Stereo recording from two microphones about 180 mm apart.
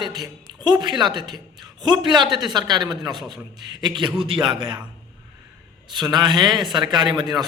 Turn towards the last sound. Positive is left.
turn(degrees=-25)  # may be behind; listen again after turning